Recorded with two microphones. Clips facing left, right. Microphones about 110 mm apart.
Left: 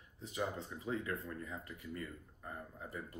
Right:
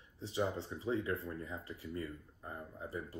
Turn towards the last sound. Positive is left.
turn(degrees=-25)  # may be behind; listen again after turning